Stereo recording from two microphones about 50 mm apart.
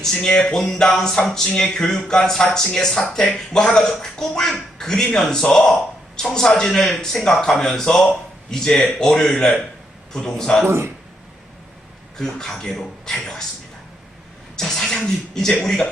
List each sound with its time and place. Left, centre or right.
0.0 s speech: centre
10.7 s speech: right
12.1 s speech: centre
14.5 s speech: centre